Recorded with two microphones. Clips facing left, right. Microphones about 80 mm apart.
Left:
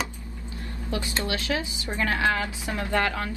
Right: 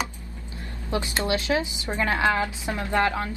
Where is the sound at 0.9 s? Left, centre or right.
Right.